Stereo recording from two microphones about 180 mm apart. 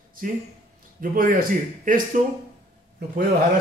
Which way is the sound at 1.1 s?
50° right (ahead or behind).